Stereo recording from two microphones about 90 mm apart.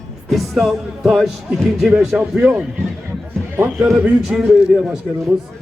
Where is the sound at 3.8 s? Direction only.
5° right (ahead or behind).